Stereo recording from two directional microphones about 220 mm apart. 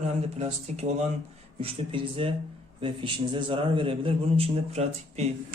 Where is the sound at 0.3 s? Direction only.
30° right (ahead or behind).